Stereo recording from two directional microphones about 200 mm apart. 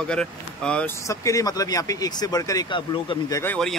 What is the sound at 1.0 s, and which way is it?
Speech, 15° left (ahead or behind).